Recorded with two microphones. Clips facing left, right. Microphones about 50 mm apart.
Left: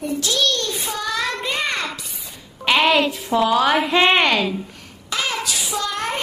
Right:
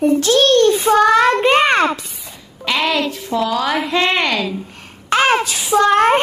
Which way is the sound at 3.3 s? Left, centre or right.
Centre.